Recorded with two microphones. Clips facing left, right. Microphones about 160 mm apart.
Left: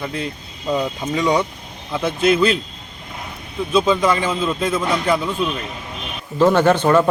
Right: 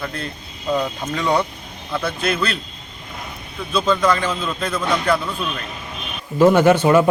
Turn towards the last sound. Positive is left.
turn(degrees=-10)  # may be behind; listen again after turning